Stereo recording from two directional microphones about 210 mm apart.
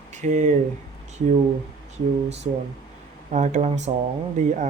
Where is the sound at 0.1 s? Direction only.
35° right (ahead or behind).